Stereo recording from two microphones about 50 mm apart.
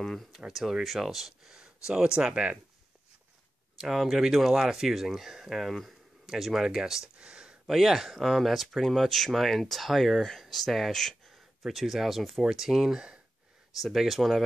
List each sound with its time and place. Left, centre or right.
0.0 s speech: centre
0.5 s speech: centre
1.5 s speech: centre
3.7 s speech: centre
7.2 s a sound: centre
7.6 s speech: centre
13.8 s speech: centre